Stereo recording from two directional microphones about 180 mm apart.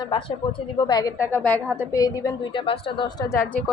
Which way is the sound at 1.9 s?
20° left (ahead or behind).